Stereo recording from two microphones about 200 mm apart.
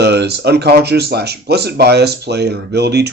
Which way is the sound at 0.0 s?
55° right (ahead or behind).